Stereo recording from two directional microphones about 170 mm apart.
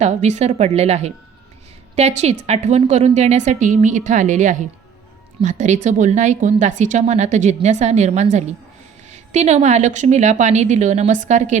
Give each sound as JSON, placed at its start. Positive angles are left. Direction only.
{"t": 0.0, "sound": "a woman's voice", "side_deg": -40}